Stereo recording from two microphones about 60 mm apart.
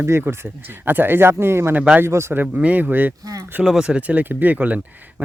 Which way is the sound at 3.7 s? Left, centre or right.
Centre.